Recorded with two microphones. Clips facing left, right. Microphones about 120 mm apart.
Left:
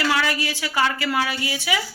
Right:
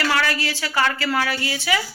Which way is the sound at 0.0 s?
15° left (ahead or behind).